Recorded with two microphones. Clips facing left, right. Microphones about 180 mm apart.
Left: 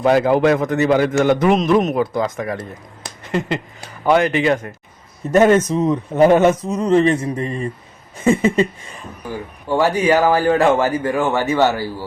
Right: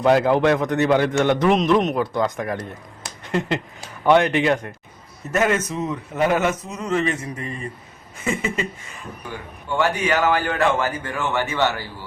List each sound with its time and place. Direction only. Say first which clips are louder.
0.0 s a man's voice: left 2 dB; 5° left (ahead or behind)
5.3 s a man's voice: left 8 dB; 30° left (ahead or behind)
9.6 s a man's voice: left 6 dB; 35° left (ahead or behind)